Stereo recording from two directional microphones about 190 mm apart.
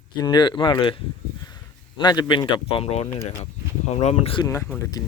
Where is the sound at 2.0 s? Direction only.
25° left (ahead or behind).